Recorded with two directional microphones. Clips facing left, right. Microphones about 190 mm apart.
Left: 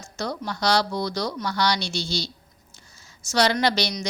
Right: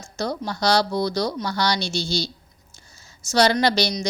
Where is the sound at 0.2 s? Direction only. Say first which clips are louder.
Right 3 dB; 30° right (ahead or behind).